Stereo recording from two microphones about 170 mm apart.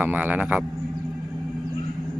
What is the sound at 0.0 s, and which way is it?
Speech, 10° right (ahead or behind).